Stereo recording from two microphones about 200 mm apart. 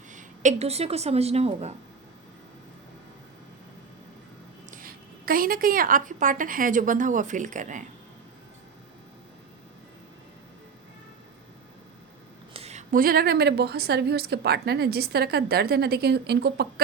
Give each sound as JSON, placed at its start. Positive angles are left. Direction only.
{"t": 0.1, "sound": "speech", "side_deg": -40}
{"t": 4.7, "sound": "a woman's voice", "side_deg": -45}
{"t": 12.5, "sound": "a woman's voice", "side_deg": -35}